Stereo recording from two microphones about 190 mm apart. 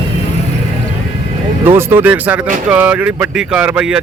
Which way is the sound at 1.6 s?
10° right (ahead or behind).